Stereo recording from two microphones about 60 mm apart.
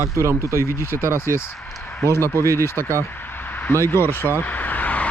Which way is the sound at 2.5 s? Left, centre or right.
Left.